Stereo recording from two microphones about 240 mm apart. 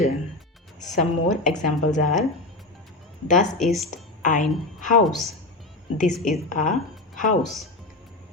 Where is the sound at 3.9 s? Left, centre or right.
Left.